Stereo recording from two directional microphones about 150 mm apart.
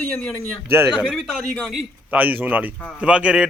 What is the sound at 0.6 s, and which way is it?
Speech, 15° right (ahead or behind).